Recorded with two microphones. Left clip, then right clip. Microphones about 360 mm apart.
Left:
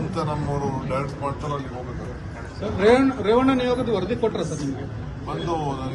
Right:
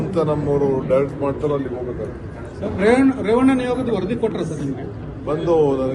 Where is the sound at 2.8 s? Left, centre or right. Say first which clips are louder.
Right 1 dB; centre.